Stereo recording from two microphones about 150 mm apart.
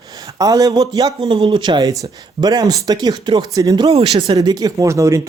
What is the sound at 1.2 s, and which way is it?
Speech, 40° right (ahead or behind).